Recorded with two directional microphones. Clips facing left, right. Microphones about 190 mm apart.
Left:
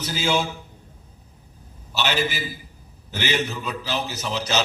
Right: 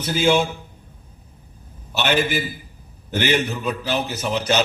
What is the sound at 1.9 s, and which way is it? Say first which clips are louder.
A man's voice: right 4 dB; 55° right (ahead or behind).